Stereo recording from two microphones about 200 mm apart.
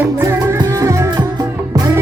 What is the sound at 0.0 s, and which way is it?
Music, 15° right (ahead or behind).